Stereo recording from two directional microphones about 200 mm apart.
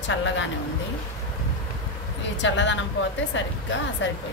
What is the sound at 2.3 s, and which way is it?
A woman's voice, 65° left (ahead or behind).